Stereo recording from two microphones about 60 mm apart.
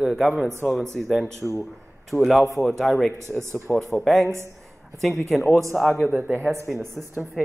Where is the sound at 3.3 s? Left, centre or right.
Right.